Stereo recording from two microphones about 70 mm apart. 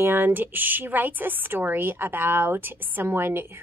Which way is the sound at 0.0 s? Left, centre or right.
Right.